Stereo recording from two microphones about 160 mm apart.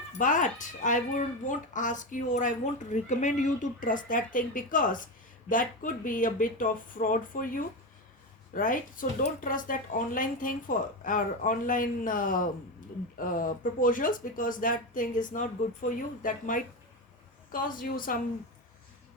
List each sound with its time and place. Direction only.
0.2 s speech: 55° left (ahead or behind)